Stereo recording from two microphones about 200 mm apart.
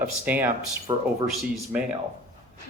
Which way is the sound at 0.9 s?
20° right (ahead or behind).